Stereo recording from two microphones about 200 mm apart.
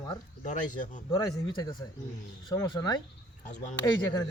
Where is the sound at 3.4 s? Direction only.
35° left (ahead or behind).